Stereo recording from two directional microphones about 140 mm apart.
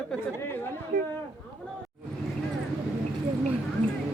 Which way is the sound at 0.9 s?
80° right.